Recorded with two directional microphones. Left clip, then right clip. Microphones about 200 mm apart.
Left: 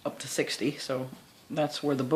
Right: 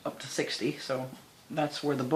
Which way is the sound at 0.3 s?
60° left (ahead or behind).